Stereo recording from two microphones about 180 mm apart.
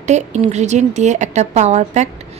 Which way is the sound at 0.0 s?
40° right (ahead or behind).